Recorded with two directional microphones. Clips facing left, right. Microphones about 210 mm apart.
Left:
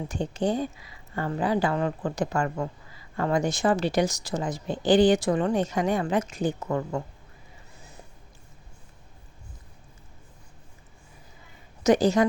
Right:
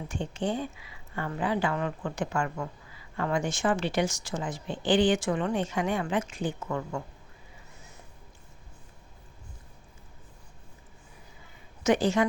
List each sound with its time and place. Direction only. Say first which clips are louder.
0.1 s speech: left 4 dB; 40° left (ahead or behind)
11.8 s a woman's voice: left 4 dB; 40° left (ahead or behind)